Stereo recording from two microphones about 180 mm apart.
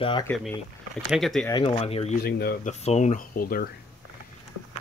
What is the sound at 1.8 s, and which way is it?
Speech, 35° left (ahead or behind).